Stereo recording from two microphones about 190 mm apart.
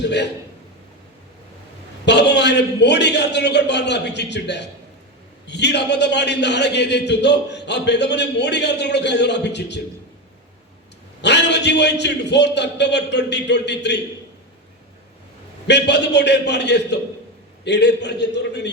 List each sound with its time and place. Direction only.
0.0 s a man's voice: 65° left (ahead or behind)
2.0 s a man's voice: 65° left (ahead or behind)
11.2 s a man's voice: 65° left (ahead or behind)
15.6 s a man's voice: 65° left (ahead or behind)